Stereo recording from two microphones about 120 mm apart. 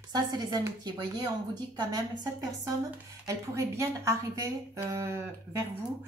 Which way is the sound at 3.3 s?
25° right (ahead or behind).